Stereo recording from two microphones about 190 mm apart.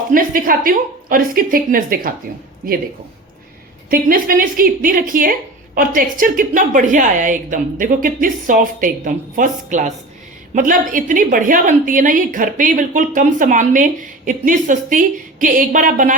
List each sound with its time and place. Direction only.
0.1 s a woman's voice: 45° right (ahead or behind)
3.8 s a woman's voice: 50° right (ahead or behind)